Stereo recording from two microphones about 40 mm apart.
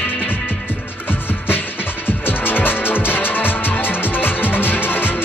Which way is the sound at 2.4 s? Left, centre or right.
Left.